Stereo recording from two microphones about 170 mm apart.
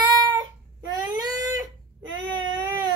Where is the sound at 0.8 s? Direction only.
25° right (ahead or behind).